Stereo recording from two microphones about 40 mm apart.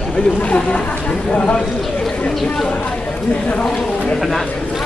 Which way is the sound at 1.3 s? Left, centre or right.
Left.